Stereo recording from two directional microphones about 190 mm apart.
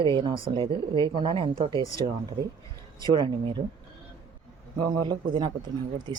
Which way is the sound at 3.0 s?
25° right (ahead or behind).